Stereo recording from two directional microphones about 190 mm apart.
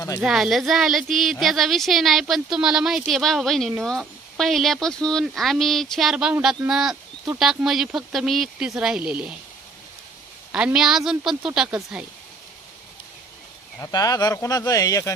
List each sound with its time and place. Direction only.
0.2 s speech: centre (ahead or behind)
10.5 s speech: 5° right (ahead or behind)
13.7 s speech: 15° left (ahead or behind)